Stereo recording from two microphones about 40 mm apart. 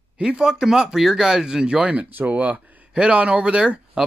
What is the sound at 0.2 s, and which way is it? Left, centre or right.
Speech, right.